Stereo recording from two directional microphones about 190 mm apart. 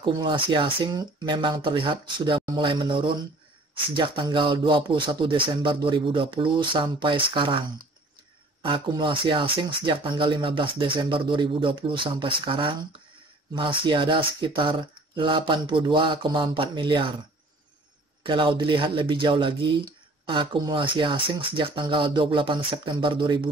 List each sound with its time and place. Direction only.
0.0 s speech: 25° right (ahead or behind)
8.6 s speech: 25° right (ahead or behind)
18.2 s speech: 25° right (ahead or behind)